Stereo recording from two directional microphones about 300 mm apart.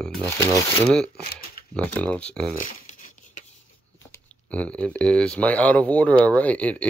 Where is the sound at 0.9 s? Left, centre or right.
Centre.